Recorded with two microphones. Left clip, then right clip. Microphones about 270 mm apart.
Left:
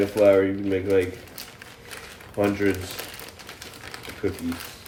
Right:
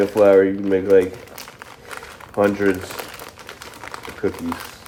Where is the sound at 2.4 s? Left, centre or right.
Right.